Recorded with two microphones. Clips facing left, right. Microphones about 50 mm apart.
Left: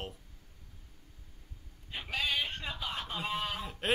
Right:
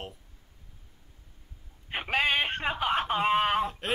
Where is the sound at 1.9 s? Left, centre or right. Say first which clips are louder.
Right 8 dB; right.